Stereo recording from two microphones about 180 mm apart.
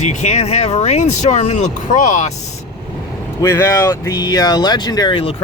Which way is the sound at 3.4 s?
15° left (ahead or behind).